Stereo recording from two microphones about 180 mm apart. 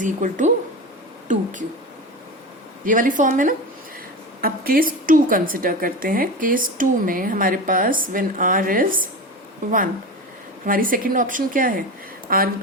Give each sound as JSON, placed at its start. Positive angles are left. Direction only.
{"t": 0.0, "sound": "a woman's voice", "side_deg": -45}
{"t": 2.8, "sound": "a woman's voice", "side_deg": -50}